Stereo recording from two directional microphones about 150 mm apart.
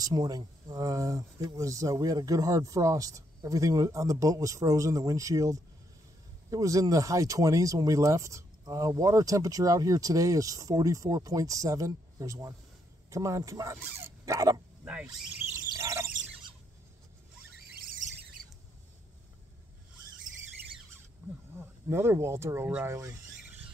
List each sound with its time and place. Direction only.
0.0 s speech: 25° right (ahead or behind)
14.9 s speech: 5° right (ahead or behind)
15.7 s squeal: 20° right (ahead or behind)
17.6 s a sound: 70° right (ahead or behind)
21.5 s speech: 15° right (ahead or behind)